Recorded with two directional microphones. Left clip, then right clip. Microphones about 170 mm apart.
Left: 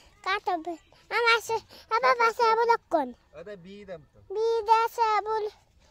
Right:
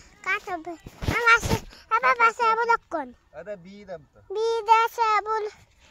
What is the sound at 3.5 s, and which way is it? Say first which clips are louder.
Speech: right 3 dB; 65° left (ahead or behind).